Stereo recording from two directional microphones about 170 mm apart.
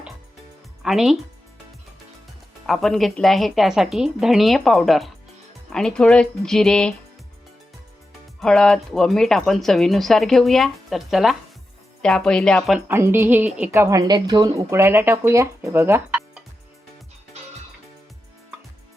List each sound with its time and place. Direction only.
0.8 s speech: centre (ahead or behind)
2.6 s speech: centre (ahead or behind)
8.4 s speech: 5° left (ahead or behind)
12.9 s a woman's voice: 15° right (ahead or behind)